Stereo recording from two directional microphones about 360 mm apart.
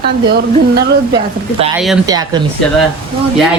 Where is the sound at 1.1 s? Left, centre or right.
Centre.